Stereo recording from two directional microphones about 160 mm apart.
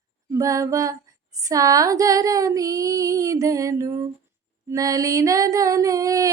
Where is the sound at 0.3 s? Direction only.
20° right (ahead or behind).